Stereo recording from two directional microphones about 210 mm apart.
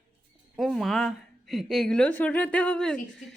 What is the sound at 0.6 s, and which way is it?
Speech, centre (ahead or behind).